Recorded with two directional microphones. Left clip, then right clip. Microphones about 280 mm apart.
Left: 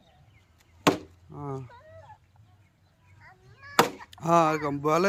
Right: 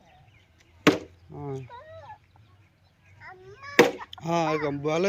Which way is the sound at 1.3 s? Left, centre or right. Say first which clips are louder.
Even; centre.